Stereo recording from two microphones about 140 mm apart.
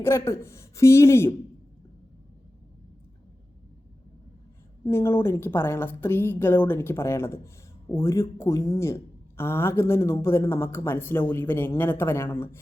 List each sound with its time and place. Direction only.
0.0 s a man's voice: 20° left (ahead or behind)
4.9 s speech: 20° left (ahead or behind)